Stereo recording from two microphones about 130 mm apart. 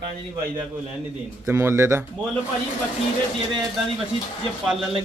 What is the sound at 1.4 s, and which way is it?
Speech, 20° right (ahead or behind).